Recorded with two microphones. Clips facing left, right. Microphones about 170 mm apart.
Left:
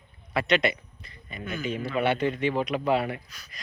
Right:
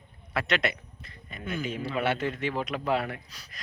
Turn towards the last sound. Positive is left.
turn(degrees=0)  # may be behind; listen again after turning